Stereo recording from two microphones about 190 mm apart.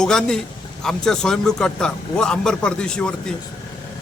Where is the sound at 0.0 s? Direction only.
5° left (ahead or behind).